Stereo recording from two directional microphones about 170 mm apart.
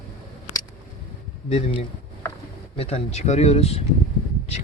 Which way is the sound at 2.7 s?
35° left (ahead or behind).